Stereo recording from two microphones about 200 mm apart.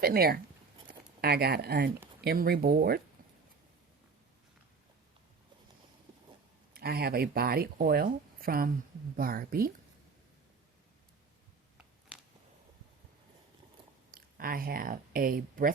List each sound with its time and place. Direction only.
0.0 s speech: 50° right (ahead or behind)
6.7 s speech: 50° right (ahead or behind)
11.8 s a sound: 5° right (ahead or behind)
14.1 s speech: 45° right (ahead or behind)